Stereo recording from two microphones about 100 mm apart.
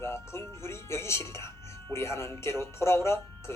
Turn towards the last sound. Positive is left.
turn(degrees=25)  # may be behind; listen again after turning